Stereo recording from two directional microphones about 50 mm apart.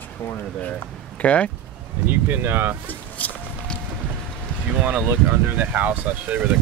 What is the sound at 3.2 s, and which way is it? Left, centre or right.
Music, left.